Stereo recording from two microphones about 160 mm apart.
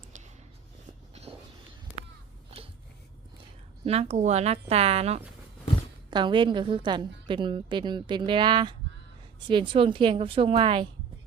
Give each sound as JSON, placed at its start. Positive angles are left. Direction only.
{"t": 1.1, "sound": "a sound", "side_deg": -40}
{"t": 3.8, "sound": "a woman's voice", "side_deg": -40}
{"t": 6.1, "sound": "a woman's voice", "side_deg": -30}